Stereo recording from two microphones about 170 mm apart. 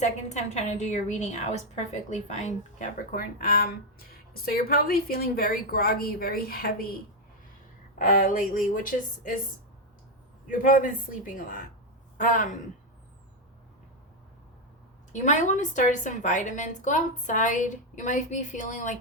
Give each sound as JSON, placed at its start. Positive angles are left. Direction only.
{"t": 0.0, "sound": "a woman's voice", "side_deg": 40}
{"t": 10.4, "sound": "a woman's voice", "side_deg": 50}
{"t": 15.1, "sound": "a woman's voice", "side_deg": 45}